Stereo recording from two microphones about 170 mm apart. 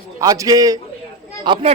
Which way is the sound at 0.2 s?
20° right (ahead or behind).